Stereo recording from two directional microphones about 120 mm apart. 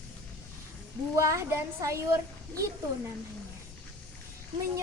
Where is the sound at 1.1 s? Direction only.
25° right (ahead or behind).